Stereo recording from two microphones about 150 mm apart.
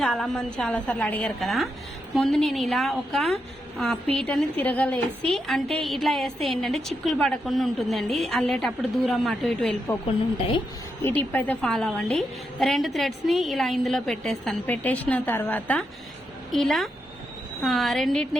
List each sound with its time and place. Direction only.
0.0 s a woman's voice: centre (ahead or behind)
10.1 s speech: 40° left (ahead or behind)
11.0 s a woman's voice: 15° left (ahead or behind)